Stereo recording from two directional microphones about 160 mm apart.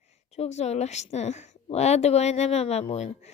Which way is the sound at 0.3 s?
45° left (ahead or behind).